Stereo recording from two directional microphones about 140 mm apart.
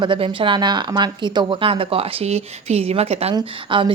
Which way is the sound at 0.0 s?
35° right (ahead or behind).